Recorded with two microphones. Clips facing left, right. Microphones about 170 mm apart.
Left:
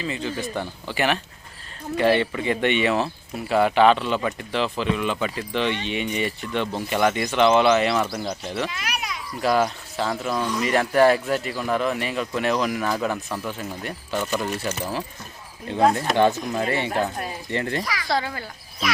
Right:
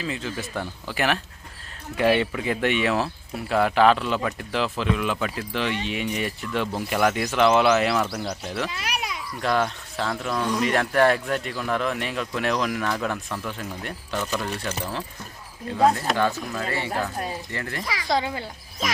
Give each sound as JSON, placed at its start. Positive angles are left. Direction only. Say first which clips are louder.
{"t": 0.0, "sound": "speech", "louder": "left 2 dB", "side_deg": 0}
{"t": 8.7, "sound": "a child's voice", "louder": "right 1 dB", "side_deg": -35}
{"t": 9.4, "sound": "speech", "louder": "left 3 dB", "side_deg": 5}
{"t": 15.6, "sound": "speech", "louder": "left 1 dB", "side_deg": 25}
{"t": 17.8, "sound": "speech", "louder": "even", "side_deg": -20}